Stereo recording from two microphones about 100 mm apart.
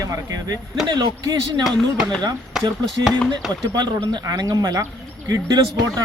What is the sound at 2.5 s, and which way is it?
Speech, 5° right (ahead or behind).